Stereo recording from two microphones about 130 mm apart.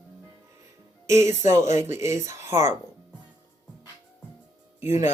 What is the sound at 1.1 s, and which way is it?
Speech, 20° right (ahead or behind).